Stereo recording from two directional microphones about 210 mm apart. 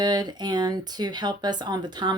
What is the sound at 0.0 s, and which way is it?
Speech, 20° right (ahead or behind).